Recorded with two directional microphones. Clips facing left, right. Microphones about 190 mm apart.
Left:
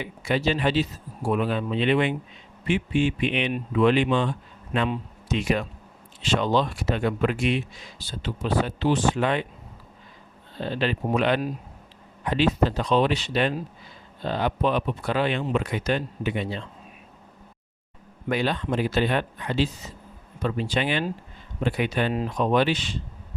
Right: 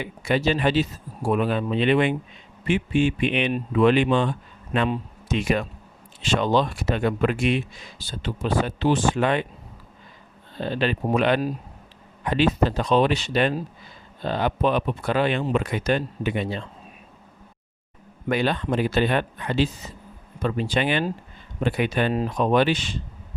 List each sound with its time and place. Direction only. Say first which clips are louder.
0.0 s speech: right 2 dB; 50° right (ahead or behind)
10.6 s speech: right 2 dB; 55° right (ahead or behind)
18.3 s speech: right 2 dB; 55° right (ahead or behind)